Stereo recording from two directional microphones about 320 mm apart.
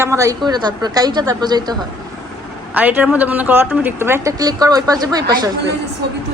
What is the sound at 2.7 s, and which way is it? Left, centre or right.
A woman's voice, centre.